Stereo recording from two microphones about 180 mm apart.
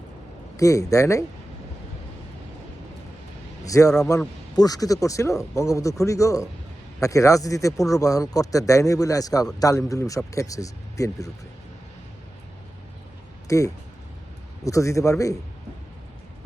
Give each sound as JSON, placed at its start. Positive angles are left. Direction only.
{"t": 0.5, "sound": "speech", "side_deg": 15}
{"t": 3.7, "sound": "a man's voice", "side_deg": 15}
{"t": 13.5, "sound": "speech", "side_deg": 15}